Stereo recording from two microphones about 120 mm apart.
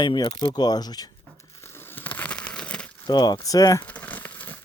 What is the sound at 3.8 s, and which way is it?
Crumpling, 10° left (ahead or behind).